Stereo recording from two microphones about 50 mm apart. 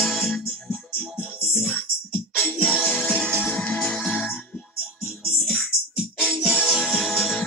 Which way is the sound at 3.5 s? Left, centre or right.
Centre.